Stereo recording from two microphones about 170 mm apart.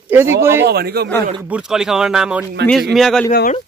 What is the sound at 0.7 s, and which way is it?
Speech, 70° right (ahead or behind).